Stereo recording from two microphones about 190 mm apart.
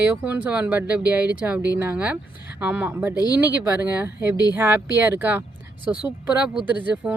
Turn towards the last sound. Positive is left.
turn(degrees=-10)  # may be behind; listen again after turning